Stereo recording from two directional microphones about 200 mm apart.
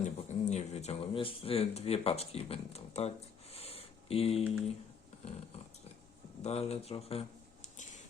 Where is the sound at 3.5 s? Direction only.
30° left (ahead or behind).